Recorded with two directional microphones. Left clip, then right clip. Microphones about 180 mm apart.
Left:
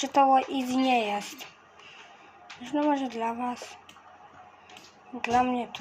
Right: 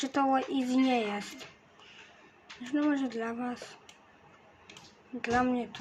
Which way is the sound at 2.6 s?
25° right (ahead or behind).